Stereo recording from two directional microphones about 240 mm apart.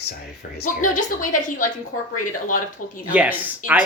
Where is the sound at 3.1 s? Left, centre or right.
Centre.